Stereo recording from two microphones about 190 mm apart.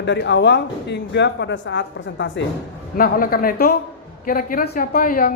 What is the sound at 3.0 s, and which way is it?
A woman's voice, 50° left (ahead or behind).